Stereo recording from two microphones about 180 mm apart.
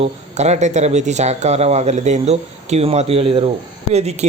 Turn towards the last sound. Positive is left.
turn(degrees=-35)  # may be behind; listen again after turning